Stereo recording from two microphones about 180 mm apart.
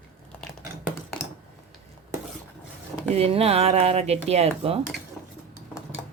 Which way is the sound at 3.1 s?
35° right (ahead or behind).